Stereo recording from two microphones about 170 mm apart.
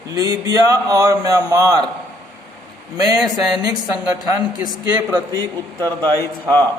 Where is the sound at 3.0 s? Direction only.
20° right (ahead or behind).